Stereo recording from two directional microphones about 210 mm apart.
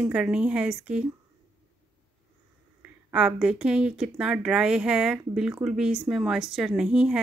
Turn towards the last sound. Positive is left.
turn(degrees=-5)  # may be behind; listen again after turning